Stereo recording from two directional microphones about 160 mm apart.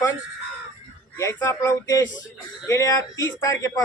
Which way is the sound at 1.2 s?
20° left (ahead or behind).